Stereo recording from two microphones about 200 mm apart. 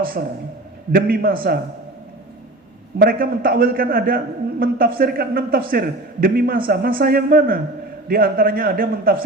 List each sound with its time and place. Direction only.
0.0 s a man's voice: 45° right (ahead or behind)
3.0 s a man's voice: 45° right (ahead or behind)